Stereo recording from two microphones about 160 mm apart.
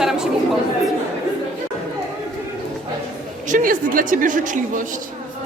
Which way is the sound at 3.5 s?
60° right (ahead or behind).